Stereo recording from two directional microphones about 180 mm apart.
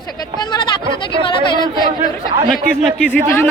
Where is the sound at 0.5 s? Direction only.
25° left (ahead or behind).